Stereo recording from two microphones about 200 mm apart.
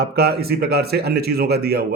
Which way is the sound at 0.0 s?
50° right (ahead or behind).